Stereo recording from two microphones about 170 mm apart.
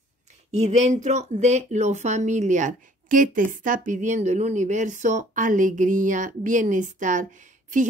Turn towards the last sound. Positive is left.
turn(degrees=-50)  # may be behind; listen again after turning